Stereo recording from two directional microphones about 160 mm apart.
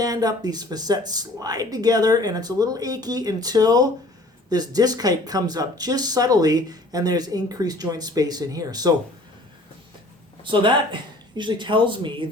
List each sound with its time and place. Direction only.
0.0 s speech: 25° right (ahead or behind)
10.4 s speech: 30° right (ahead or behind)